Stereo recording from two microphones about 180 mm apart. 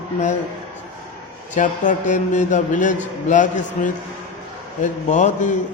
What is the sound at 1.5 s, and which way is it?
A man's voice, 45° left (ahead or behind).